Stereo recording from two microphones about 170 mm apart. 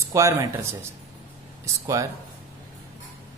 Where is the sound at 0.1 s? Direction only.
15° right (ahead or behind).